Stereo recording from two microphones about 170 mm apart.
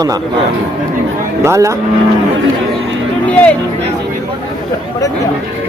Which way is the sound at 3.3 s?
10° left (ahead or behind).